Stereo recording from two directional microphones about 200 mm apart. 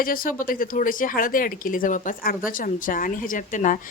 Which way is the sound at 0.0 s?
45° left (ahead or behind).